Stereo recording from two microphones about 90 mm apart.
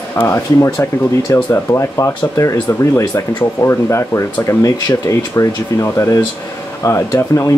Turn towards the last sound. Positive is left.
turn(degrees=35)  # may be behind; listen again after turning